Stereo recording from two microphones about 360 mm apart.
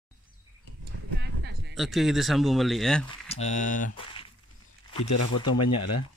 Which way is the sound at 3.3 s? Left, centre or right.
Centre.